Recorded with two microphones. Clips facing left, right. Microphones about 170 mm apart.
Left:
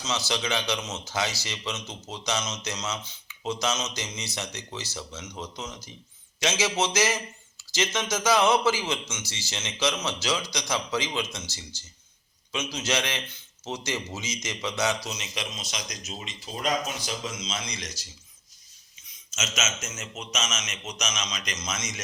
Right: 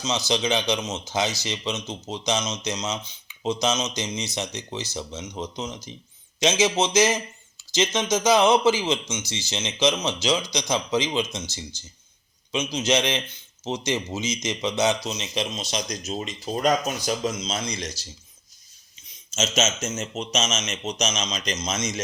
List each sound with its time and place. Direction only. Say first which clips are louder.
0.0 s speech: right 5 dB; 15° right (ahead or behind)